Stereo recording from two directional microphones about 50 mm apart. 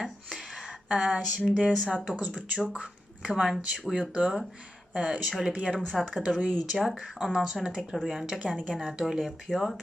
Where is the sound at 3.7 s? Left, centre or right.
Centre.